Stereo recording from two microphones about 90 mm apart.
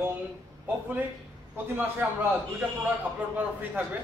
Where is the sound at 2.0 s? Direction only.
20° right (ahead or behind).